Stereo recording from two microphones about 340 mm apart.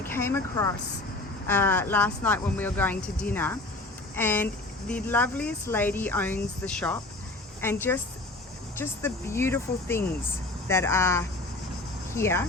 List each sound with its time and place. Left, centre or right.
0.0 s speech: centre